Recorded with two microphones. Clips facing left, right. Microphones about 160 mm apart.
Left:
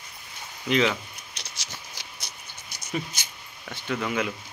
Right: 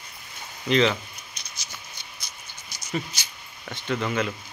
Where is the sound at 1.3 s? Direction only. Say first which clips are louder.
Left 1 dB; 90° left.